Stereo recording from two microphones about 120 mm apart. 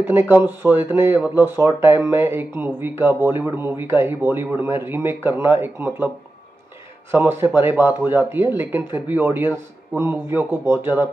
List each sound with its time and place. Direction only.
0.0 s speech: 20° right (ahead or behind)
7.1 s speech: 20° right (ahead or behind)